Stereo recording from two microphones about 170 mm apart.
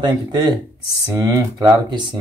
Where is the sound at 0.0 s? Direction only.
25° right (ahead or behind).